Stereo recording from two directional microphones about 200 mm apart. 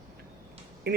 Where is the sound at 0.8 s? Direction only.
50° right (ahead or behind).